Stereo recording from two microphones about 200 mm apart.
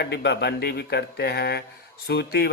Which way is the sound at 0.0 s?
60° left (ahead or behind).